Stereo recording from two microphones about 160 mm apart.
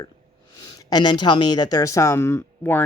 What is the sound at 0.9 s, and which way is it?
Speech, 25° left (ahead or behind).